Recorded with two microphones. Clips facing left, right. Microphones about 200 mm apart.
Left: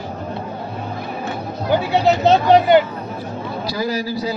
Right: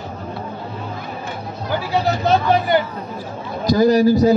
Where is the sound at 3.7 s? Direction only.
45° right (ahead or behind).